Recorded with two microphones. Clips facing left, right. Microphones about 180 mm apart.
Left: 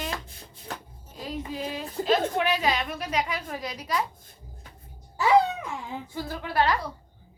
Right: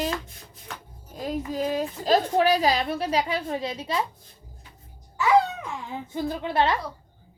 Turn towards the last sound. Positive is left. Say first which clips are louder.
# right 2 dB
turn(degrees=-25)  # may be behind; listen again after turning